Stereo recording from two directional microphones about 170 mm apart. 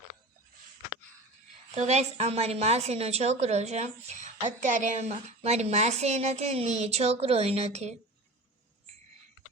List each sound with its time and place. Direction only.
1.7 s a woman's voice: 40° right (ahead or behind)